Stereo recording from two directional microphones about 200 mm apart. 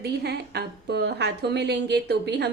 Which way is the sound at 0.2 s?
55° right (ahead or behind).